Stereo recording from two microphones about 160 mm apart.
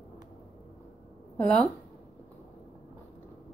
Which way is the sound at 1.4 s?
5° left (ahead or behind).